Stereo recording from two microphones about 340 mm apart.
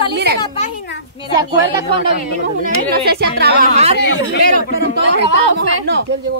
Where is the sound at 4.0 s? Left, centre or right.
Left.